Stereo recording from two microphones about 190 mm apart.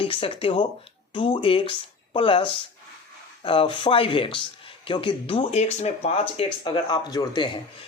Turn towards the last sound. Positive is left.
turn(degrees=20)  # may be behind; listen again after turning